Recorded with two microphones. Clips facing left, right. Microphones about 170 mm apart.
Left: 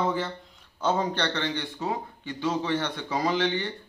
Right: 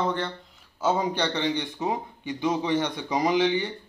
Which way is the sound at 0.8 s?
10° right (ahead or behind).